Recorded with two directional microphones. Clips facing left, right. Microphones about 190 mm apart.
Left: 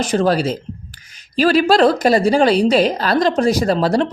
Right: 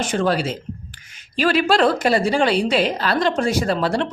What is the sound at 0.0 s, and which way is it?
A woman's voice, 35° left (ahead or behind).